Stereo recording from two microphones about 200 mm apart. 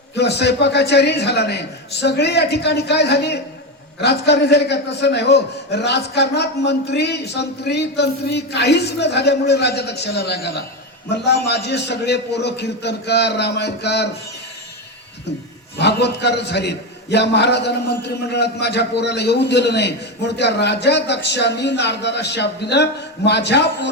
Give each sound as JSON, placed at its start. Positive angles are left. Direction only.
{"t": 0.2, "sound": "a man's voice", "side_deg": 55}
{"t": 15.8, "sound": "a man's voice", "side_deg": 55}